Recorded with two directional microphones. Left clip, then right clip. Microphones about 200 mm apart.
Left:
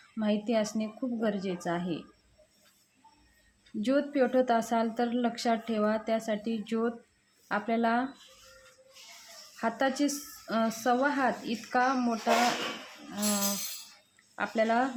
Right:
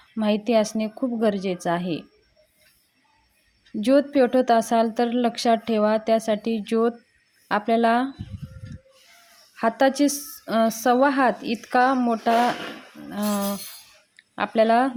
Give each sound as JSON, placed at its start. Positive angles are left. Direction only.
{"t": 0.2, "sound": "a woman's voice", "side_deg": -40}
{"t": 3.8, "sound": "a woman's voice", "side_deg": -40}
{"t": 9.6, "sound": "a woman's voice", "side_deg": -40}